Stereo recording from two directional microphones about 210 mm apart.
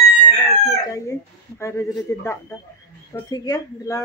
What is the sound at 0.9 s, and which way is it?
Speech, 15° left (ahead or behind).